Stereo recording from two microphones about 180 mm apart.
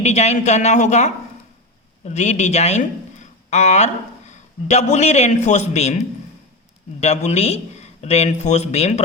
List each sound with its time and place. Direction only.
0.0 s a man's voice: 40° left (ahead or behind)